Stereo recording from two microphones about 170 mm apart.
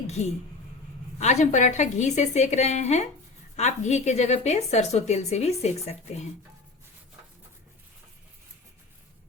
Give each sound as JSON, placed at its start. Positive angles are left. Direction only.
{"t": 0.2, "sound": "a woman's voice", "side_deg": 40}